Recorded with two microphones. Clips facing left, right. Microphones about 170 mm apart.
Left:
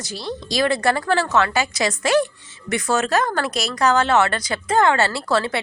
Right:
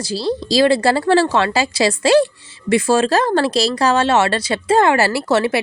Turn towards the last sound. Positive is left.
turn(degrees=-25)  # may be behind; listen again after turning